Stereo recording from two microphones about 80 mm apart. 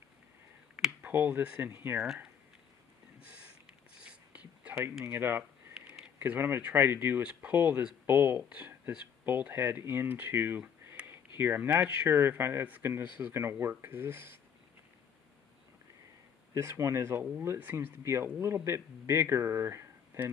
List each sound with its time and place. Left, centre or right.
1.0 s speech: right
3.2 s a sound: centre
5.0 s speech: right
11.0 s a sound: right
11.7 s speech: centre
16.5 s speech: right